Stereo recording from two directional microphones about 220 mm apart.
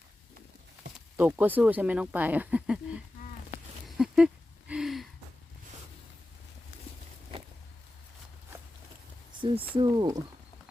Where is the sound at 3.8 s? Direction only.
Centre (ahead or behind).